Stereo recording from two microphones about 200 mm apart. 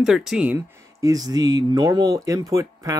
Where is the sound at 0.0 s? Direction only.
Centre (ahead or behind).